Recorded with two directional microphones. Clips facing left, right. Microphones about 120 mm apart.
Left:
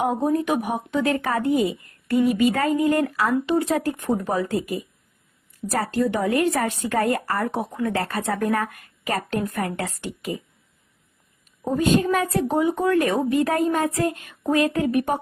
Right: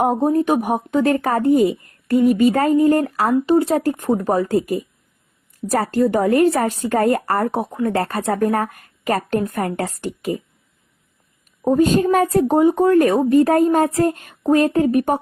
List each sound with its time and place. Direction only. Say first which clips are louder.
0.0 s speech: right 5 dB; 40° right (ahead or behind)
11.6 s speech: right 5 dB; 40° right (ahead or behind)